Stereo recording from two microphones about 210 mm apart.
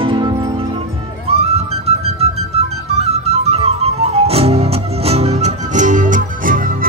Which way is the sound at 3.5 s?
30° right (ahead or behind).